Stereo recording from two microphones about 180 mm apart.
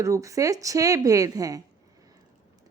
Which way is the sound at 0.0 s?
15° right (ahead or behind).